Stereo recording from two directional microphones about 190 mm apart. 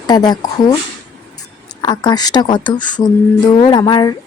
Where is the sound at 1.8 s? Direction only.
20° left (ahead or behind).